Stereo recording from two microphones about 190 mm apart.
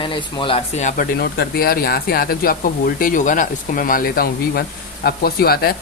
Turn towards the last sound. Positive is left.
turn(degrees=55)  # may be behind; listen again after turning